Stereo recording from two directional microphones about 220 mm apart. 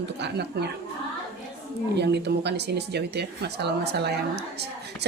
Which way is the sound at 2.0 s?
50° right (ahead or behind).